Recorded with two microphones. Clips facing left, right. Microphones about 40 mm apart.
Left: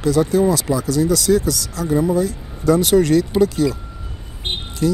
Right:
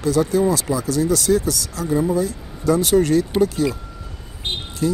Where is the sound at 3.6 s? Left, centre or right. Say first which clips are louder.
Left 2 dB; right.